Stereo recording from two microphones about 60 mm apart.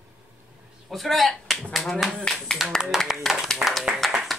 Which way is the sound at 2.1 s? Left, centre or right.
Centre.